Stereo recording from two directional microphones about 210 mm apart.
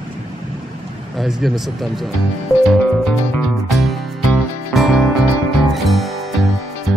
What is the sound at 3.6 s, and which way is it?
Music, centre (ahead or behind).